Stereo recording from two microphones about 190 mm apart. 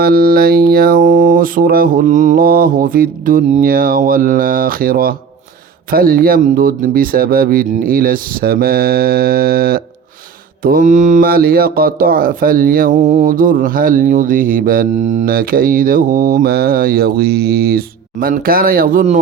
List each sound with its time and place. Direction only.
0.0 s speech: 55° right (ahead or behind)